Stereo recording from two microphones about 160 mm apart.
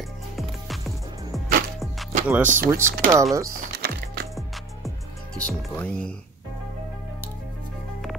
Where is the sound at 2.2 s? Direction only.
10° right (ahead or behind).